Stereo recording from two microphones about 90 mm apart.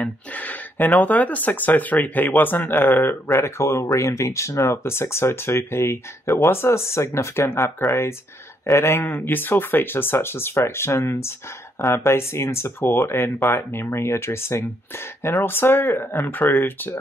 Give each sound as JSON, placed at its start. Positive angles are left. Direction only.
{"t": 0.0, "sound": "speech", "side_deg": 20}